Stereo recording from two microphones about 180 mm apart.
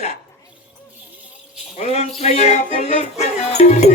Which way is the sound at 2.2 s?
35° left (ahead or behind).